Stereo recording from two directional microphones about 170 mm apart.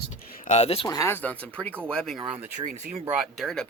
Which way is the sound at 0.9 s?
15° left (ahead or behind).